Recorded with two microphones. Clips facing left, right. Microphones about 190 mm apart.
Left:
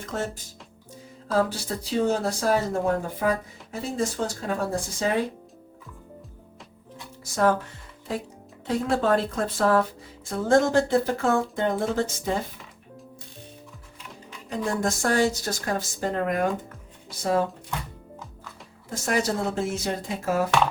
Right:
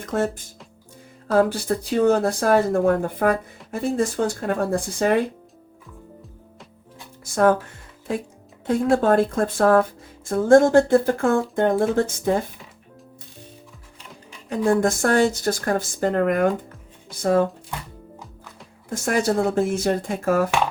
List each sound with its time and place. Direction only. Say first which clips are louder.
0.0 s music: right 7 dB; 55° right (ahead or behind)
1.3 s speech: right 6 dB; 55° right (ahead or behind)
8.6 s speech: right 5 dB; 50° right (ahead or behind)
14.5 s speech: right 7 dB; 55° right (ahead or behind)
18.9 s speech: right 4 dB; 50° right (ahead or behind)